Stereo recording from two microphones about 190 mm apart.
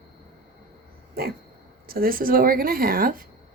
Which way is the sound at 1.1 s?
55° right (ahead or behind).